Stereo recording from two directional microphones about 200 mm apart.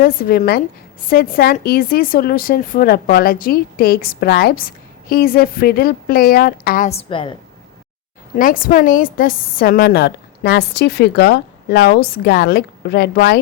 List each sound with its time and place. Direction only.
0.0 s speech: 50° left (ahead or behind); by 7.3 s 25° left (ahead or behind)
8.4 s speech: 45° left (ahead or behind)